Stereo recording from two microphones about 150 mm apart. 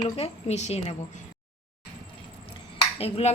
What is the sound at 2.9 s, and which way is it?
Speech, 40° left (ahead or behind).